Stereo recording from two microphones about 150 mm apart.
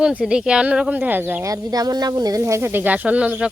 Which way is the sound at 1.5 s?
25° right (ahead or behind).